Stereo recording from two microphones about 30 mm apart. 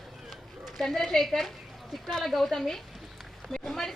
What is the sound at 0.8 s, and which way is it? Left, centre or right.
A woman's voice, centre.